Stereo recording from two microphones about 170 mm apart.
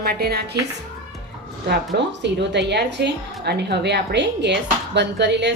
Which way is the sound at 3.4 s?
75° right (ahead or behind).